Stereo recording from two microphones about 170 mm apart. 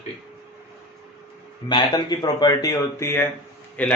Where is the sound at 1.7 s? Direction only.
25° left (ahead or behind).